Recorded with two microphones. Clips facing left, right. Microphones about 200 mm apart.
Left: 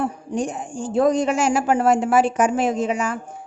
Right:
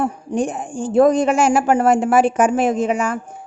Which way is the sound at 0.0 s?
55° right (ahead or behind).